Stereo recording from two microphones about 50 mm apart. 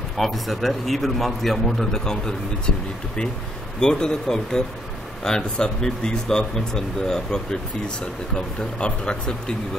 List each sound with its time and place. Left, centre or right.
0.2 s a man's voice: centre
3.8 s speech: centre